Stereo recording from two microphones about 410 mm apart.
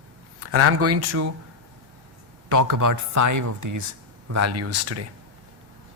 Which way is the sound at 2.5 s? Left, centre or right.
Right.